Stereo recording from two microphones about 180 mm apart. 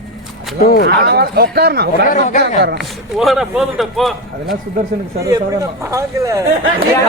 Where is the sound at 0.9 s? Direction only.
65° right (ahead or behind).